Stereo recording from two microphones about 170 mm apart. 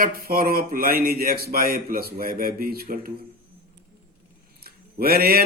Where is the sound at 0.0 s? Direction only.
60° right (ahead or behind).